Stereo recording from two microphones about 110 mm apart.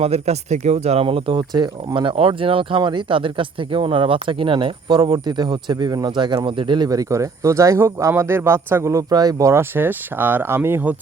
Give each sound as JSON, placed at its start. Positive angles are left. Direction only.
{"t": 0.0, "sound": "speech", "side_deg": -75}